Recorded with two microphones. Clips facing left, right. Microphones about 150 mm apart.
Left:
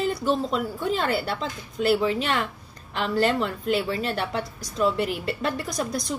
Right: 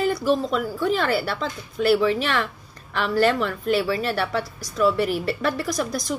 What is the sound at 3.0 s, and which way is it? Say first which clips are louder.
Speech: right 3 dB; 25° left (ahead or behind).